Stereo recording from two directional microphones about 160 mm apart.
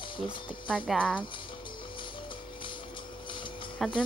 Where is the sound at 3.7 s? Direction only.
5° left (ahead or behind).